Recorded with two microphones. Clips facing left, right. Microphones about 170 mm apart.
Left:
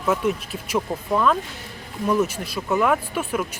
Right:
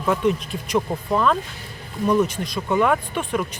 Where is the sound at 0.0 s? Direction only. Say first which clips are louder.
Right 2 dB; 5° left (ahead or behind).